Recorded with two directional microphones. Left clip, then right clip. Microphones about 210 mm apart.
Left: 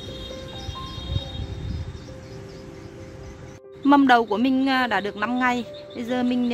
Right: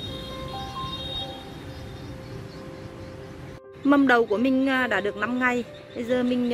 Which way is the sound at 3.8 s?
45° left (ahead or behind).